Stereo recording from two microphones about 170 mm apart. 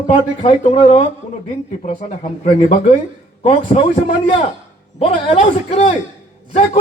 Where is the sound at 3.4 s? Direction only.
35° left (ahead or behind).